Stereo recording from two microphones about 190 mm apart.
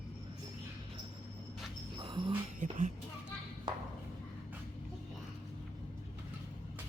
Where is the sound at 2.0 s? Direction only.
25° right (ahead or behind).